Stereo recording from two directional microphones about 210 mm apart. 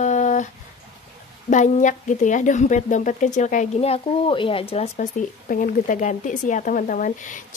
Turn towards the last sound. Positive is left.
turn(degrees=35)  # may be behind; listen again after turning